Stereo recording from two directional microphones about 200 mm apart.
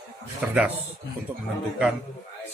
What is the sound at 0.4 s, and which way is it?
Speech, 5° right (ahead or behind).